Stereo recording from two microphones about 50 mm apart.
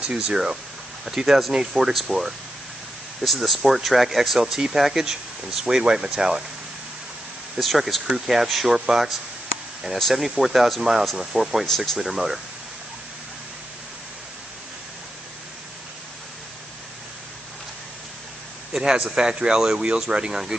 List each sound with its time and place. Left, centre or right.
0.0 s speech: centre
7.5 s speech: centre
11.6 s speech: centre
12.0 s speech: centre
18.7 s speech: centre